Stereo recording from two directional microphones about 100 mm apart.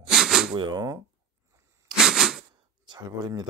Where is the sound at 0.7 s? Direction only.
40° right (ahead or behind).